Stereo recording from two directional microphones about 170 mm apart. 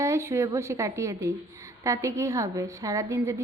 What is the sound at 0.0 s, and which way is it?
A woman's voice, 15° right (ahead or behind).